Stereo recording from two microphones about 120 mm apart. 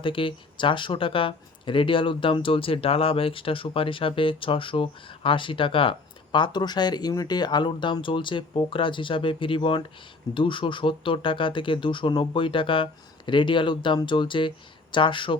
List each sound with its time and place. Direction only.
0.0 s speech: 45° left (ahead or behind)